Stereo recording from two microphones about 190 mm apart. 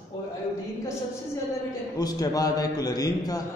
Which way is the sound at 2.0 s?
20° left (ahead or behind).